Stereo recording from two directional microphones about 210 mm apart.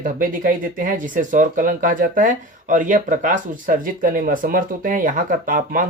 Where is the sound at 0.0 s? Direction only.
40° right (ahead or behind).